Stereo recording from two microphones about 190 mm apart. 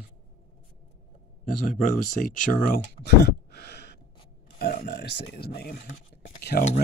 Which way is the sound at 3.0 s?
60° left (ahead or behind).